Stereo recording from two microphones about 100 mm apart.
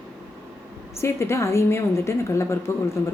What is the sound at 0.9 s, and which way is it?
A woman's voice, 25° left (ahead or behind).